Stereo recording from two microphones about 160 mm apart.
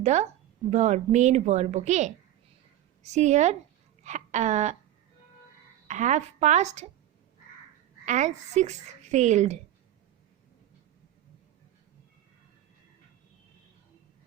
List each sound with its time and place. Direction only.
0.0 s a woman's voice: 45° right (ahead or behind)
5.9 s a woman's voice: 45° right (ahead or behind)
8.0 s a woman's voice: 50° right (ahead or behind)